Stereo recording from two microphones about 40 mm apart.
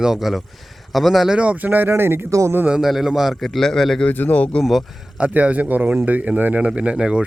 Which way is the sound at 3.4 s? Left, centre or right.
Centre.